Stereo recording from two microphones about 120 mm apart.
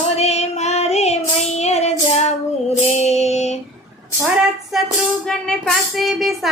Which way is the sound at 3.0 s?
65° left (ahead or behind).